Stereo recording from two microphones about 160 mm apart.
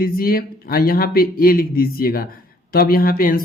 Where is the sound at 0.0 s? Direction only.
65° left (ahead or behind).